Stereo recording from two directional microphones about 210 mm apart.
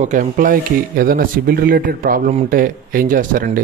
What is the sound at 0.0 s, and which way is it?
Speech, 40° right (ahead or behind).